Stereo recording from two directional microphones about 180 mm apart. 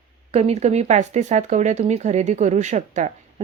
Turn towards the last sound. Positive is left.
turn(degrees=-40)  # may be behind; listen again after turning